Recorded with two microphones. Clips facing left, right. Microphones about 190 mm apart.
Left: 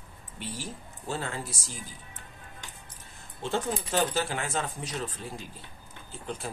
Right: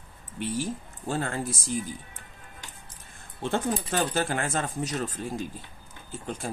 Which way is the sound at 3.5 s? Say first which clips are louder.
Right 1 dB; 55° right (ahead or behind).